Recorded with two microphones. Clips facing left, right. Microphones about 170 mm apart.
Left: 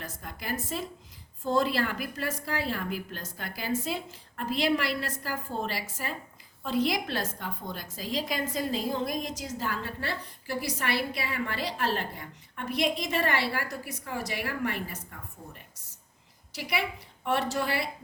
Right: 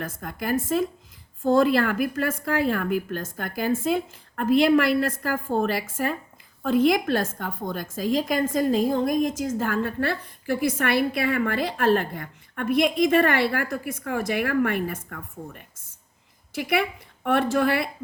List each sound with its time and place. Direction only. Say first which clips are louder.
0.0 s a woman's voice: right 9 dB; 50° right (ahead or behind)